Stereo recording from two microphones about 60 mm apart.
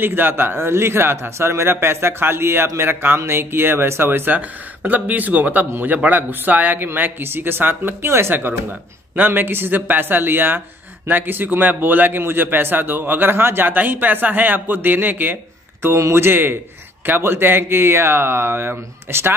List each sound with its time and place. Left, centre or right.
0.0 s a man's voice: right
16.0 s a man's voice: right